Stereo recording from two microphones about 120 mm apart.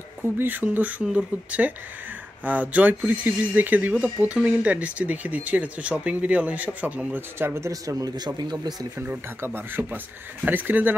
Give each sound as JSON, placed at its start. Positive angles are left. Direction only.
{"t": 0.2, "sound": "speech", "side_deg": -15}
{"t": 8.9, "sound": "speech", "side_deg": -15}